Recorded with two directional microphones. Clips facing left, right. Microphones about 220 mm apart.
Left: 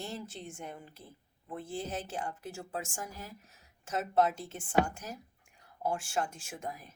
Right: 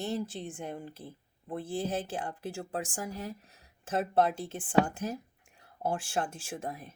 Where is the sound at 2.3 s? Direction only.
30° right (ahead or behind).